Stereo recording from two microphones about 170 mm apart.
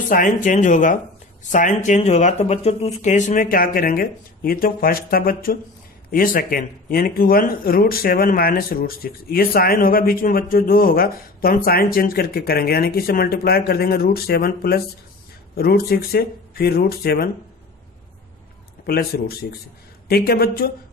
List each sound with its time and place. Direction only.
0.1 s speech: 50° left (ahead or behind); by 17.3 s 65° left (ahead or behind)
18.9 s speech: 65° left (ahead or behind)